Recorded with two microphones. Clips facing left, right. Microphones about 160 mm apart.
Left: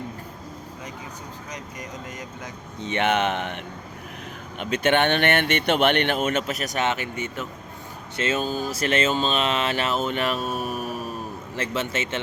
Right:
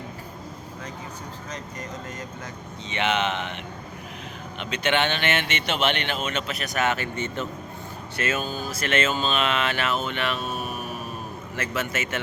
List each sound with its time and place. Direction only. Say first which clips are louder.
2.8 s speech: left 3 dB; 55° left (ahead or behind)
4.6 s speech: left 4 dB; 50° left (ahead or behind)
6.7 s speech: right 2 dB; 20° left (ahead or behind)
8.7 s a sound: left 1 dB; 35° left (ahead or behind)
11.5 s speech: left 2 dB; 30° left (ahead or behind)